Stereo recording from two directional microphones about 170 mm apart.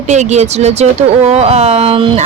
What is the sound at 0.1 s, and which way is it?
Speech, 45° right (ahead or behind).